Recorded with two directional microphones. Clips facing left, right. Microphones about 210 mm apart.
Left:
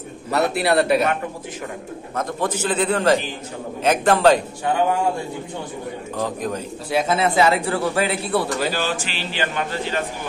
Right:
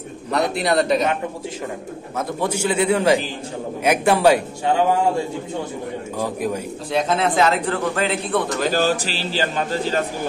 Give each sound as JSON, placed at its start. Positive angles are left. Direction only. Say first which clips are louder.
{"t": 0.3, "sound": "a man's voice", "louder": "left 1 dB", "side_deg": 5}
{"t": 2.1, "sound": "a man's voice", "louder": "right 1 dB", "side_deg": -10}
{"t": 6.1, "sound": "a man's voice", "louder": "right 1 dB", "side_deg": -10}
{"t": 6.9, "sound": "a man's voice", "louder": "even", "side_deg": 5}
{"t": 8.6, "sound": "a man's voice", "louder": "right 5 dB", "side_deg": -40}